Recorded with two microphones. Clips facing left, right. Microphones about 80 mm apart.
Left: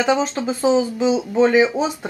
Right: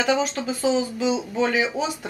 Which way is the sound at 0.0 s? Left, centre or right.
Left.